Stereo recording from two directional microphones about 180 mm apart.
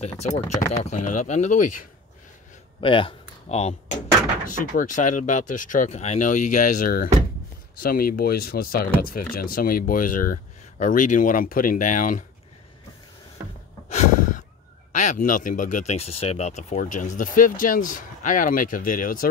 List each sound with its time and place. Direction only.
0.0 s speech: 35° left (ahead or behind)
2.8 s speech: 30° left (ahead or behind)
4.5 s speech: 45° left (ahead or behind)
13.8 s a sound: 40° left (ahead or behind)
14.9 s speech: 45° left (ahead or behind)